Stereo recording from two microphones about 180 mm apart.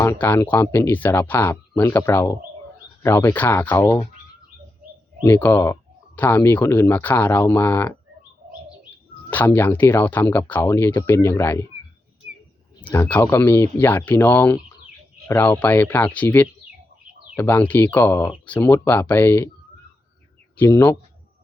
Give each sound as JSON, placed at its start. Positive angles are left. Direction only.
{"t": 0.0, "sound": "speech", "side_deg": 15}
{"t": 5.2, "sound": "speech", "side_deg": 15}
{"t": 9.3, "sound": "speech", "side_deg": 10}
{"t": 12.8, "sound": "speech", "side_deg": 10}
{"t": 20.6, "sound": "speech", "side_deg": 15}